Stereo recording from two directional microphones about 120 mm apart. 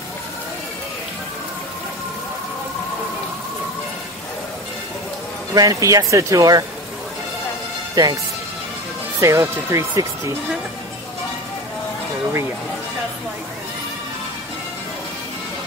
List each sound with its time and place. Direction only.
5.5 s speech: 30° right (ahead or behind)
7.9 s speech: 30° right (ahead or behind)
9.2 s speech: 25° right (ahead or behind)